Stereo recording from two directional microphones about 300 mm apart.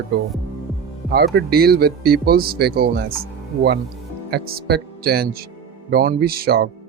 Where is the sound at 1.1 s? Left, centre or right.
Right.